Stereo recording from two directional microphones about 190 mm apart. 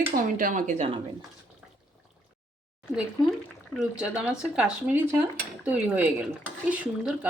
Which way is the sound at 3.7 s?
5° right (ahead or behind).